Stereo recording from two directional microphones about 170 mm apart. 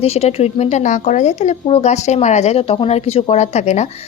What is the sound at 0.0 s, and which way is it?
A woman's voice, 35° left (ahead or behind).